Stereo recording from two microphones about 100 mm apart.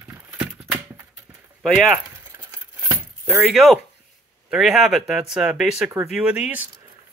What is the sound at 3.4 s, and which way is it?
Speech, centre (ahead or behind).